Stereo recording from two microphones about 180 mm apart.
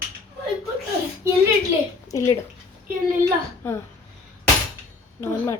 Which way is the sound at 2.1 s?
15° left (ahead or behind).